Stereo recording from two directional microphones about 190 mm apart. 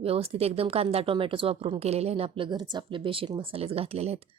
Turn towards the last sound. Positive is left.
turn(degrees=-35)  # may be behind; listen again after turning